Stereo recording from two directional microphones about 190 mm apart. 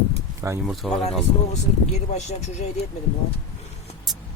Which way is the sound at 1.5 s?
35° left (ahead or behind).